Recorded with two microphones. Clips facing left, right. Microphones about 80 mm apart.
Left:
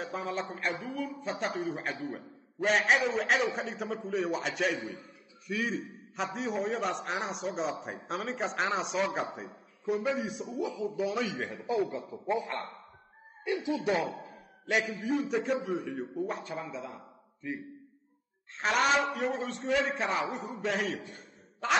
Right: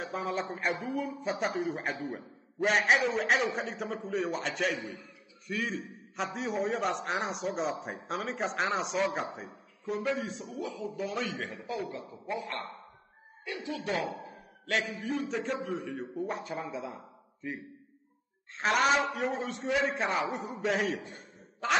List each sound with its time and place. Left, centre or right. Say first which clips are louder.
0.0 s a man's voice: right 1 dB; centre
0.8 s speech: right 2 dB; centre
1.2 s a man's voice: right 1 dB; centre
4.7 s a man's voice: left 1 dB; left
5.5 s a man's voice: left 1 dB; centre
10.8 s a man's voice: left 3 dB; centre
11.5 s a man's voice: left 5 dB; centre
13.6 s a man's voice: left 2 dB; centre
16.6 s speech: right 2 dB; centre
18.6 s a man's voice: even; centre